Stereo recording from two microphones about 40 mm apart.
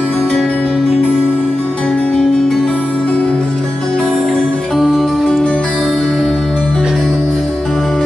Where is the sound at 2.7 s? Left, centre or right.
Left.